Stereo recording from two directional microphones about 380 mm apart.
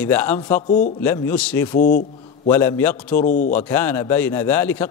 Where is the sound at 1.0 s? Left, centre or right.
Centre.